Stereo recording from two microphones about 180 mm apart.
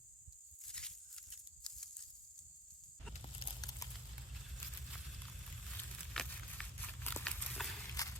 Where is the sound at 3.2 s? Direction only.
25° left (ahead or behind).